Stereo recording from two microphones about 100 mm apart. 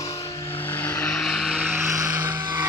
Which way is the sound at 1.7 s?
30° right (ahead or behind).